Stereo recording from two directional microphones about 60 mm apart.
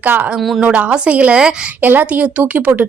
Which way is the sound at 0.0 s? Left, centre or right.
Right.